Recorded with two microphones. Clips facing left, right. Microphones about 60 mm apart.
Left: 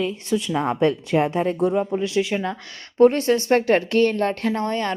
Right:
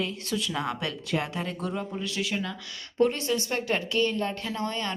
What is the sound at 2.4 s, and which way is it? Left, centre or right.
A woman's voice, left.